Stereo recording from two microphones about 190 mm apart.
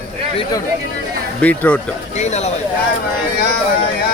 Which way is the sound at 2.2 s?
35° left (ahead or behind).